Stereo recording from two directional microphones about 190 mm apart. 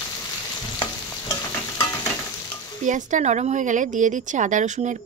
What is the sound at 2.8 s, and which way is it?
Speech, 40° right (ahead or behind).